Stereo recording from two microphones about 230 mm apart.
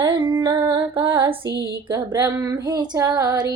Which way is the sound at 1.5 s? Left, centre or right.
Right.